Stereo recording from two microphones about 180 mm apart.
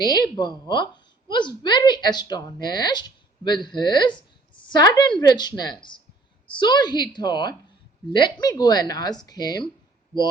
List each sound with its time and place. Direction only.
0.0 s a woman's voice: 20° left (ahead or behind)